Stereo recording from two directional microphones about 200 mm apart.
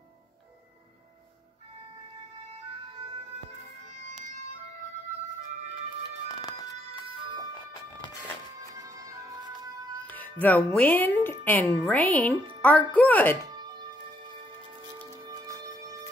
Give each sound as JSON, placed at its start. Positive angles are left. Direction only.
{"t": 6.2, "sound": "music", "side_deg": 20}
{"t": 8.5, "sound": "music", "side_deg": -15}
{"t": 10.0, "sound": "music", "side_deg": 10}
{"t": 10.4, "sound": "a woman's voice", "side_deg": 5}
{"t": 15.0, "sound": "music", "side_deg": -15}